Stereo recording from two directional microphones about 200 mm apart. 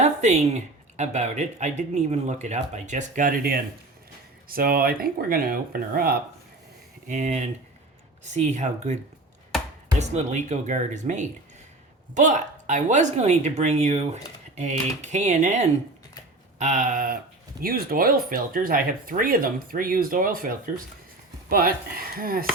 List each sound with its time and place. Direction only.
0.0 s speech: 35° right (ahead or behind)
10.0 s speech: 35° right (ahead or behind)